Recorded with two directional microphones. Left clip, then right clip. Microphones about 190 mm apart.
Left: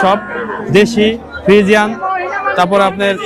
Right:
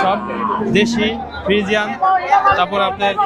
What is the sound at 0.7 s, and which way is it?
A man's voice, 60° left (ahead or behind).